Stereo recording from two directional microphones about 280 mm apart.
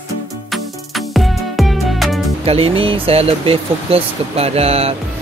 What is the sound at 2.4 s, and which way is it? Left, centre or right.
Speech, right.